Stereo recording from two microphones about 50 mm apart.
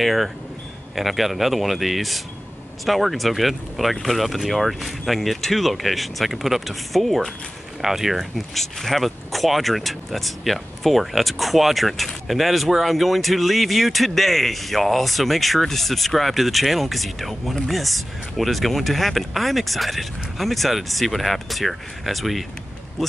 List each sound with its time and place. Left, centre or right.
0.0 s speech: centre